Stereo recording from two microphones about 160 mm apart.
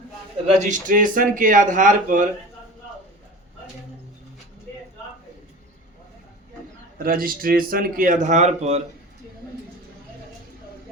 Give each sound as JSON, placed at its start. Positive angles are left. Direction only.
{"t": 0.4, "sound": "speech", "side_deg": -50}
{"t": 7.0, "sound": "speech", "side_deg": -65}